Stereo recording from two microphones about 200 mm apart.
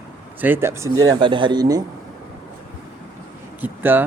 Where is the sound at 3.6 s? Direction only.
10° right (ahead or behind).